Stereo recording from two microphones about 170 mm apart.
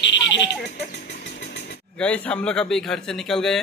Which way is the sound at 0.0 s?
90° left.